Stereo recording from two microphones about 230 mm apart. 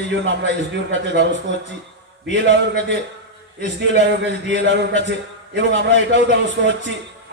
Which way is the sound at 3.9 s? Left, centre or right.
Right.